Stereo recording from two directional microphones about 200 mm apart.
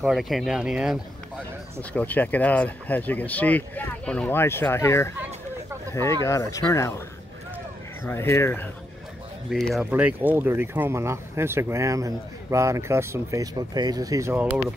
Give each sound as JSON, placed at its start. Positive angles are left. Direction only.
{"t": 0.0, "sound": "speech", "side_deg": 0}
{"t": 1.8, "sound": "speech", "side_deg": 10}
{"t": 6.2, "sound": "speech", "side_deg": 15}
{"t": 8.0, "sound": "speech", "side_deg": 10}
{"t": 9.5, "sound": "speech", "side_deg": 0}